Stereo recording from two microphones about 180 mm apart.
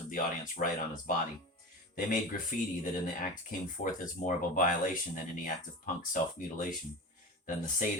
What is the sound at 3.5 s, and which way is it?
Speech, 50° left (ahead or behind).